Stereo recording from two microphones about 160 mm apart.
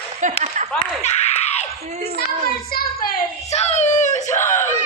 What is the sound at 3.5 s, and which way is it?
Screaming, 45° left (ahead or behind).